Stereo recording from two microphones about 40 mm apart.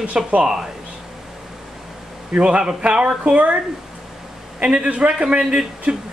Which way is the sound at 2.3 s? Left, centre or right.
Right.